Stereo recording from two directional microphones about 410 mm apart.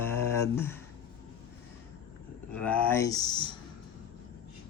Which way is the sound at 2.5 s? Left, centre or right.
Centre.